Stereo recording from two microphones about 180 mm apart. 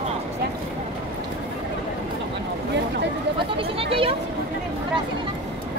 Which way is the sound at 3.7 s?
30° right (ahead or behind).